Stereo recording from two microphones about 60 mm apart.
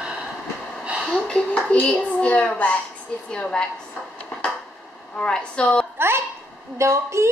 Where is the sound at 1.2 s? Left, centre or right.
Centre.